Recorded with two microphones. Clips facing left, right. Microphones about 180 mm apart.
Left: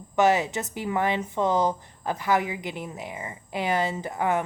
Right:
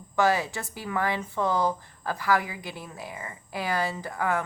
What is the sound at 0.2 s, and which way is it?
Speech, 20° left (ahead or behind).